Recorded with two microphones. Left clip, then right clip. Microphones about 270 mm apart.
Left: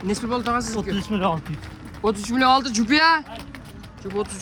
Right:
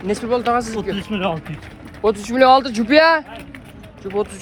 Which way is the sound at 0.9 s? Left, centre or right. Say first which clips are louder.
Left 2 dB; left.